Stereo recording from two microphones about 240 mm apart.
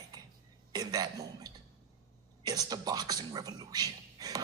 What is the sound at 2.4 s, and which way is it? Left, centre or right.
Speech, centre.